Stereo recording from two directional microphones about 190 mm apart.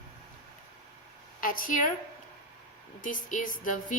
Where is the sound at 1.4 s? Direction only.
45° left (ahead or behind).